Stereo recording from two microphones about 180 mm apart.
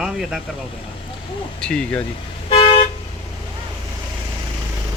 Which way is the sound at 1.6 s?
5° left (ahead or behind).